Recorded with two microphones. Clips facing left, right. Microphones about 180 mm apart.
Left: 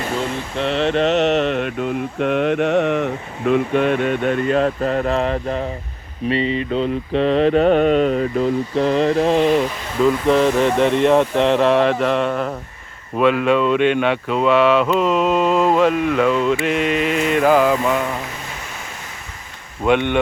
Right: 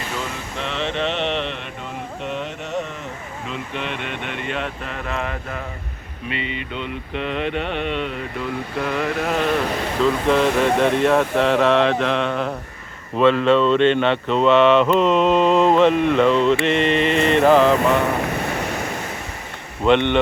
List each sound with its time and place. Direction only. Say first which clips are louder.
0.6 s mantra: left 7 dB; 35° left (ahead or behind)
2.2 s speech: left 13 dB; 60° left (ahead or behind); by 5.5 s 35° left (ahead or behind)
6.2 s mantra: left 9 dB; 35° left (ahead or behind)
10.2 s speech: left 1 dB; 10° left (ahead or behind)
16.6 s mantra: right 1 dB; 5° left (ahead or behind)
19.8 s speech: right 1 dB; 10° left (ahead or behind)